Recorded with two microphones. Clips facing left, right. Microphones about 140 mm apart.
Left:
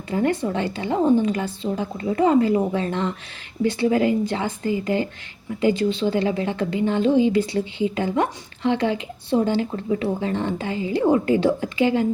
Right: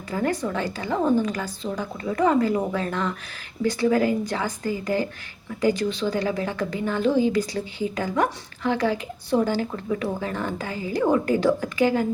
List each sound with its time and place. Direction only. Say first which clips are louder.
0.1 s a woman's voice: left 3 dB; 25° left (ahead or behind)